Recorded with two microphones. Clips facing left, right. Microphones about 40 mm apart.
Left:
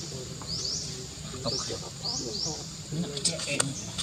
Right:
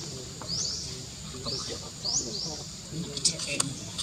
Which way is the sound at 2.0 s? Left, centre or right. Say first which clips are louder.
Even; centre.